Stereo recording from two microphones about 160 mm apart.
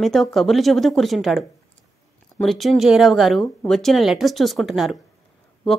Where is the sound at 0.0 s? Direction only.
Centre (ahead or behind).